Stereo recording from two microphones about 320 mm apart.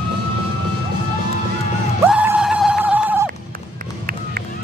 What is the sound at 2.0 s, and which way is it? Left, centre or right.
Music, centre.